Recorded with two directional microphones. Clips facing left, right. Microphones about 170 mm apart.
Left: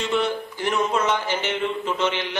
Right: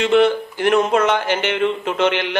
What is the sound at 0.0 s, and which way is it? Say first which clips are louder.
Speech: right 9 dB; 65° right (ahead or behind).